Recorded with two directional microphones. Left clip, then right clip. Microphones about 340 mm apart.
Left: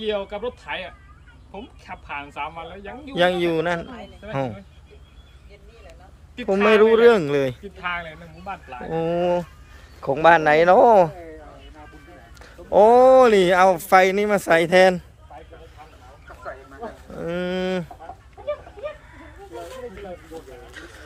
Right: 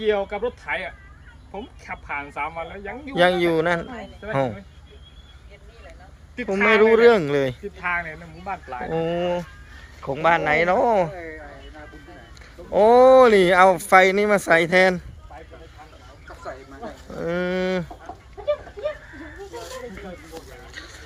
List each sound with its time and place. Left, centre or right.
0.0 s speech: centre
6.6 s speech: centre
8.9 s speech: centre
12.7 s speech: centre
17.2 s speech: centre
18.4 s a sound: right
20.7 s a sound: centre